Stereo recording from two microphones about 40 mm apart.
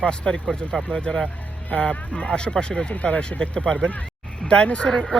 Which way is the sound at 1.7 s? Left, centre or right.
Left.